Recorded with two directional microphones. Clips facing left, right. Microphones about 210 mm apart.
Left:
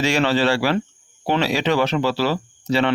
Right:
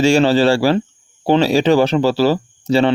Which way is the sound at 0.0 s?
30° right (ahead or behind).